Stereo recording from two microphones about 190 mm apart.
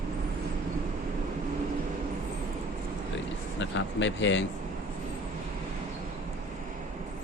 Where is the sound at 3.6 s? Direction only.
75° left (ahead or behind).